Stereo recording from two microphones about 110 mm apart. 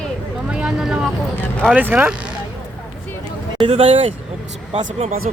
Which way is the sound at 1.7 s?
15° right (ahead or behind).